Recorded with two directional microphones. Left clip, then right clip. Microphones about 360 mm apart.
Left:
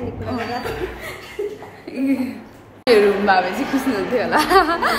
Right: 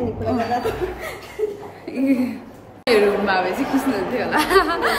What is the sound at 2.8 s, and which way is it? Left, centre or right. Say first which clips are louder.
A woman's voice: left 3 dB; centre.